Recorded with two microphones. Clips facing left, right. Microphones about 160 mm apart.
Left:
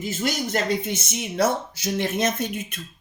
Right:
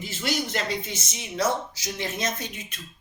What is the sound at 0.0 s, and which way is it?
Speech, 45° left (ahead or behind).